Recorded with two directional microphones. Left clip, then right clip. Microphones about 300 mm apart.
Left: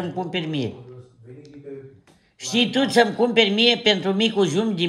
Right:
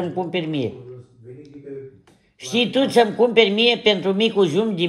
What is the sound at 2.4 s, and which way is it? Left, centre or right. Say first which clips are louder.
Speech: right 1 dB; left.